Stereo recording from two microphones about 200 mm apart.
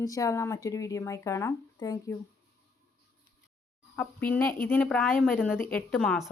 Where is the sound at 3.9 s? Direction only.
10° left (ahead or behind).